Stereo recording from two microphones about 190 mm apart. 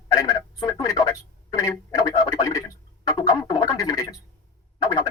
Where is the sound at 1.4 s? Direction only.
20° left (ahead or behind).